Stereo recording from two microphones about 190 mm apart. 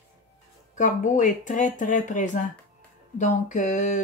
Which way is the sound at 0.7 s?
40° left (ahead or behind).